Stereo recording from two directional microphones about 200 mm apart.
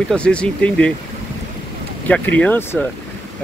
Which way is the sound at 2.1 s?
5° left (ahead or behind).